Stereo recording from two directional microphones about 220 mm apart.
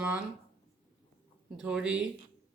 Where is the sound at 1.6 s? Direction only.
5° right (ahead or behind).